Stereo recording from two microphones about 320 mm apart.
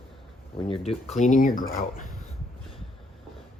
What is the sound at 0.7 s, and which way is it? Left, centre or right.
Speech, left.